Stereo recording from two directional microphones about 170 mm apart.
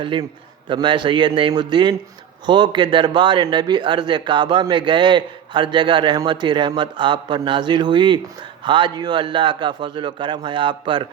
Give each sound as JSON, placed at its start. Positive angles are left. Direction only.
{"t": 0.0, "sound": "speech", "side_deg": -30}